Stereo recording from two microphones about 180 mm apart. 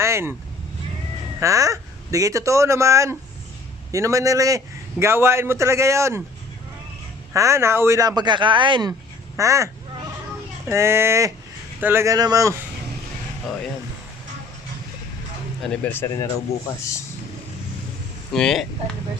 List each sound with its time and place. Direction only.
0.0 s vehicle: 15° right (ahead or behind)
1.4 s a man's voice: 20° right (ahead or behind)
7.3 s speech: 15° right (ahead or behind)
8.9 s quack: 15° right (ahead or behind)
10.7 s a man's voice: 15° right (ahead or behind)
15.6 s speech: 10° left (ahead or behind)
18.3 s speech: centre (ahead or behind)